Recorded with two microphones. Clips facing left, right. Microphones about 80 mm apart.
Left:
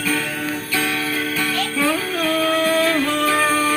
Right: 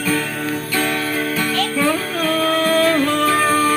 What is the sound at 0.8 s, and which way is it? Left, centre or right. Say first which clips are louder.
Music: right 2 dB; centre.